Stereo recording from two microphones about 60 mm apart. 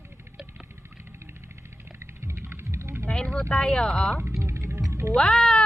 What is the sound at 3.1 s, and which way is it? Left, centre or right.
Vehicle, centre.